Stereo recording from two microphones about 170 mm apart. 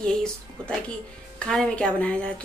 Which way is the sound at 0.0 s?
5° left (ahead or behind).